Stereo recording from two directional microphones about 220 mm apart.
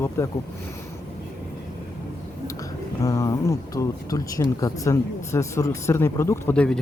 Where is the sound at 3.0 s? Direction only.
15° left (ahead or behind).